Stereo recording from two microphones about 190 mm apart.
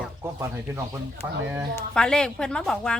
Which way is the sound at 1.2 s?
15° right (ahead or behind).